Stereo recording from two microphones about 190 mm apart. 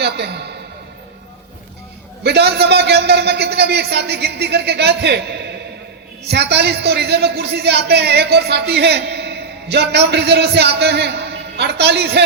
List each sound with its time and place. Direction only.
0.0 s a man's voice: 60° right (ahead or behind)
2.2 s speech: 60° right (ahead or behind)